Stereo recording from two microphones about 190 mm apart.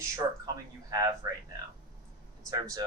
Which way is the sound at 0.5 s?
20° right (ahead or behind).